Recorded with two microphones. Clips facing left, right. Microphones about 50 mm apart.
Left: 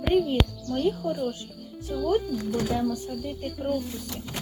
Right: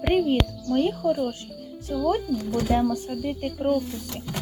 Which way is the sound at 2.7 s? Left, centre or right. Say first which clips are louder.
Right 4 dB; right.